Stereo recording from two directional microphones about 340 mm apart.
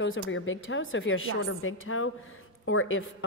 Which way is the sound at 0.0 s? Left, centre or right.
Left.